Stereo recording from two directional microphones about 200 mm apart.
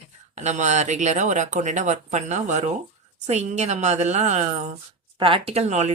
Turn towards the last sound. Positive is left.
turn(degrees=-35)  # may be behind; listen again after turning